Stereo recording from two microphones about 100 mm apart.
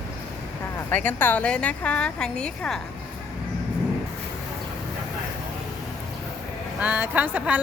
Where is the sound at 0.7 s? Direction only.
20° left (ahead or behind).